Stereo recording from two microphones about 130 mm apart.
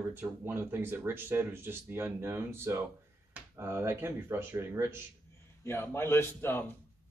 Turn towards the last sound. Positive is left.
turn(degrees=15)  # may be behind; listen again after turning